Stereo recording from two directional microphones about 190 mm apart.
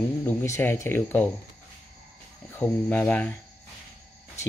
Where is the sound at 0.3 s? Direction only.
10° left (ahead or behind).